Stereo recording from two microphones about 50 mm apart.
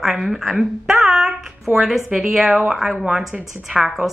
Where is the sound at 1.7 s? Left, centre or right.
Centre.